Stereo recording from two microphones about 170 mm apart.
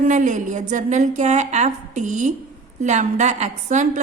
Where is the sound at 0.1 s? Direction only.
45° right (ahead or behind).